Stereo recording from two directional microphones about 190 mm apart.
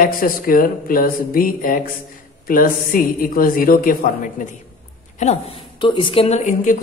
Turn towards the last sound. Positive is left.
turn(degrees=40)  # may be behind; listen again after turning